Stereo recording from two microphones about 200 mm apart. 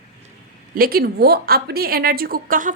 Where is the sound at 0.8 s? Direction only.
50° right (ahead or behind).